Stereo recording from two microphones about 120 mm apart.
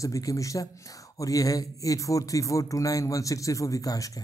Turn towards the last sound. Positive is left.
turn(degrees=30)  # may be behind; listen again after turning